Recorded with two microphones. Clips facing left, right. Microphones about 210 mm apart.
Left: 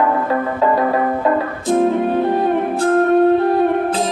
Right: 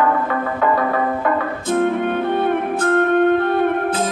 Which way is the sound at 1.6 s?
35° left (ahead or behind).